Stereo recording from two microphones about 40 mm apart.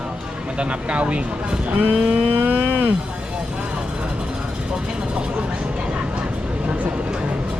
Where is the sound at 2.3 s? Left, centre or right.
Right.